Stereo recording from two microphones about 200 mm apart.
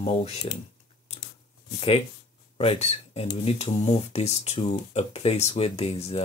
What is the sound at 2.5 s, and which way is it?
Speech, 30° left (ahead or behind).